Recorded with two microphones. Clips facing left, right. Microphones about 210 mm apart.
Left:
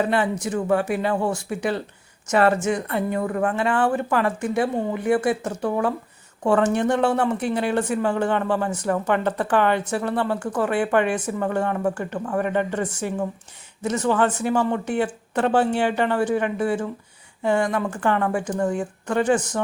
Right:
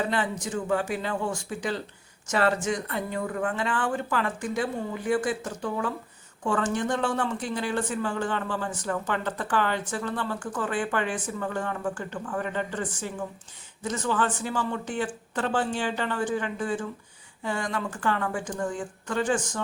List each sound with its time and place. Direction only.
0.0 s speech: 60° left (ahead or behind)